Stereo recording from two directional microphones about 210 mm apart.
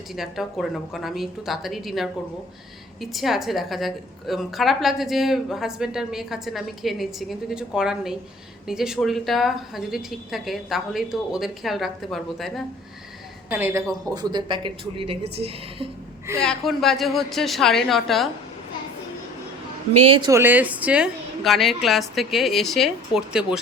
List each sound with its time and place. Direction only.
0.2 s a woman's voice: centre (ahead or behind); by 15.9 s 25° right (ahead or behind)
16.4 s a woman's voice: centre (ahead or behind)
20.1 s a woman's voice: 15° right (ahead or behind)